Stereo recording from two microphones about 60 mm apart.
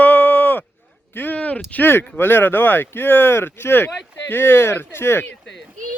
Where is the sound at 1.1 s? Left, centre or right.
Left.